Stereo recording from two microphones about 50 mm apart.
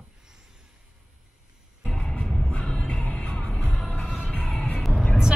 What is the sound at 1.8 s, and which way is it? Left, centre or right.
Music, centre.